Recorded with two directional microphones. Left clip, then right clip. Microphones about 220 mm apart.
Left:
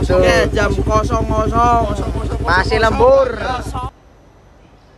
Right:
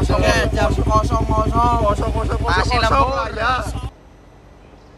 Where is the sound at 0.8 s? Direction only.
55° left (ahead or behind).